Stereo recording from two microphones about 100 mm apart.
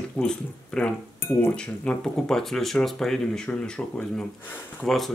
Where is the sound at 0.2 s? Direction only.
15° left (ahead or behind).